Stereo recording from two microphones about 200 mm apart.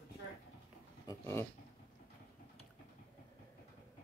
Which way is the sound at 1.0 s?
15° left (ahead or behind).